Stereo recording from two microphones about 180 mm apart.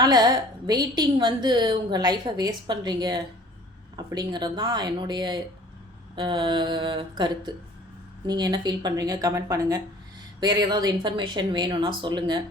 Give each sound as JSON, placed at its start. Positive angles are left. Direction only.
{"t": 0.0, "sound": "a woman's voice", "side_deg": -20}